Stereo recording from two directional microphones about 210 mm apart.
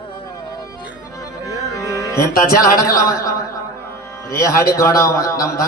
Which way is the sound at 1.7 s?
15° left (ahead or behind).